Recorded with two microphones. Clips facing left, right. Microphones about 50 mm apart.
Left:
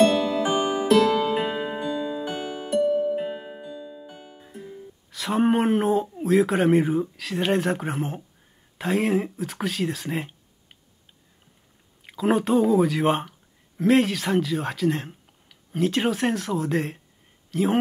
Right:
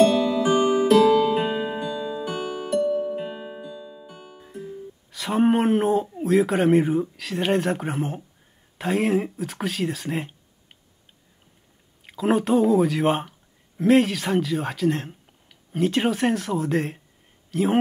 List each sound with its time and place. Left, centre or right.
0.0 s music: left
1.9 s music: left; by 6.0 s centre
6.0 s speech: centre
12.1 s speech: centre